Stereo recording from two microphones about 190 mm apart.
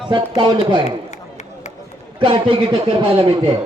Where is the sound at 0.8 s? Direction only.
40° left (ahead or behind).